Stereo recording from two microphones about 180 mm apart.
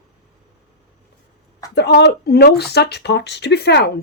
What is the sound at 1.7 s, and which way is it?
Speech, 70° left (ahead or behind).